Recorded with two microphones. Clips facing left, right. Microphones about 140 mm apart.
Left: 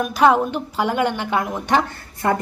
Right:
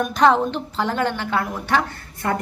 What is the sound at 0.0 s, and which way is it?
A woman's voice, 5° left (ahead or behind).